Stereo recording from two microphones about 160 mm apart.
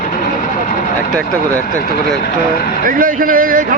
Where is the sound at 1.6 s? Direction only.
70° left (ahead or behind).